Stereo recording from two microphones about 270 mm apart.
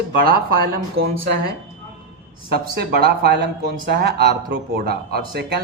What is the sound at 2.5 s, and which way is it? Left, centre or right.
Speech, right.